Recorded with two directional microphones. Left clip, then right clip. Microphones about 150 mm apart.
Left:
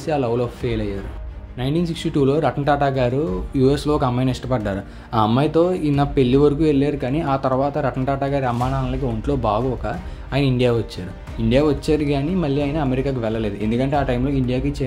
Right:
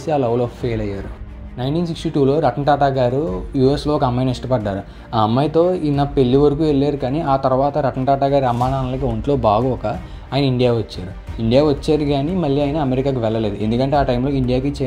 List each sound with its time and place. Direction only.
0.0 s a man's voice: 10° right (ahead or behind)
9.2 s speech: 20° right (ahead or behind)
10.3 s a man's voice: 5° right (ahead or behind)